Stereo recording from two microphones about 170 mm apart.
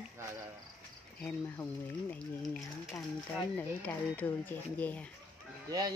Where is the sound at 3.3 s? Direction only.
10° left (ahead or behind).